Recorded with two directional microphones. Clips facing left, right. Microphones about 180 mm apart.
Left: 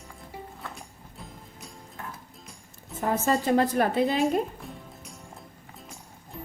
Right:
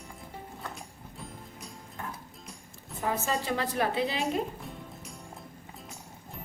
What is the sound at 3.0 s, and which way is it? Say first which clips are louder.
A woman's voice: left 5 dB; 45° left (ahead or behind).